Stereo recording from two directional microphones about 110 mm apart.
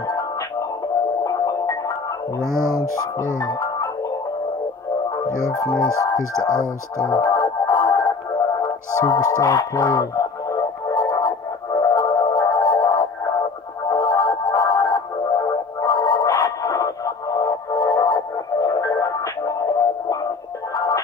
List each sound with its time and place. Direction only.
1.2 s music: 30° left (ahead or behind)
2.4 s speech: 25° right (ahead or behind)
3.3 s speech: 35° left (ahead or behind)
5.5 s music: 35° left (ahead or behind)